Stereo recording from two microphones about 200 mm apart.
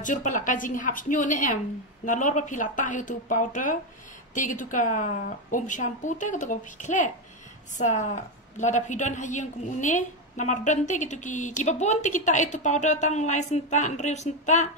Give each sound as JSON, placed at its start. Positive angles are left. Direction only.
{"t": 0.0, "sound": "a woman's voice", "side_deg": 40}